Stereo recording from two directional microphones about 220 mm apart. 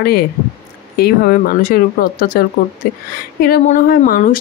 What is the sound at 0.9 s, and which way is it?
A woman's voice, 45° left (ahead or behind).